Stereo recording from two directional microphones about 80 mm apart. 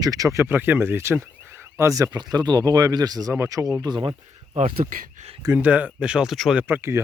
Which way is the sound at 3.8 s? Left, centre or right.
Right.